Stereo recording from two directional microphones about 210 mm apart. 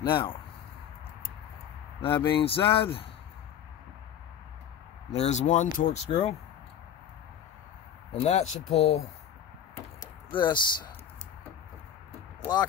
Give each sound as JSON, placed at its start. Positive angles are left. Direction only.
{"t": 0.1, "sound": "speech", "side_deg": 25}
{"t": 2.0, "sound": "speech", "side_deg": 25}
{"t": 5.1, "sound": "speech", "side_deg": 30}
{"t": 8.1, "sound": "speech", "side_deg": 30}
{"t": 10.3, "sound": "speech", "side_deg": 20}